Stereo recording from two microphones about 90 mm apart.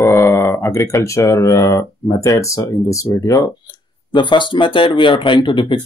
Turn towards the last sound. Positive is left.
turn(degrees=65)  # may be behind; listen again after turning